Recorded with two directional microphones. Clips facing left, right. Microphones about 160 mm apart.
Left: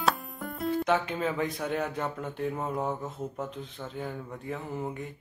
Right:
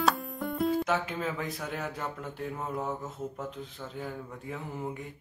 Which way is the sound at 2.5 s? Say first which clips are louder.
Left 3 dB; 15° left (ahead or behind).